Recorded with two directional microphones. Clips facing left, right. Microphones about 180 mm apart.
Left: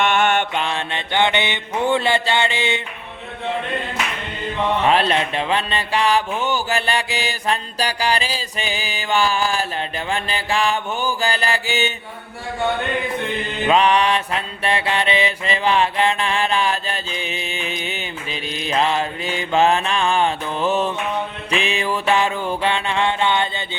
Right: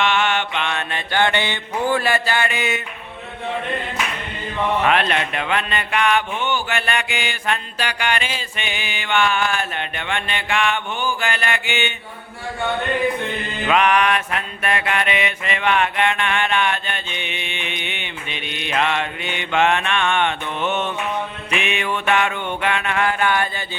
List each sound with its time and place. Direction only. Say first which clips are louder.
0.0 s mantra: left 2 dB; 50° left (ahead or behind)
0.6 s mantra: left 1 dB; 30° left (ahead or behind)
4.9 s mantra: left 2 dB; 30° left (ahead or behind)
13.7 s mantra: left 1 dB; 30° left (ahead or behind)